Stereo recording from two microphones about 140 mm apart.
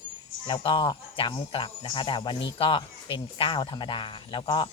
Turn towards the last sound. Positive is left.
turn(degrees=35)  # may be behind; listen again after turning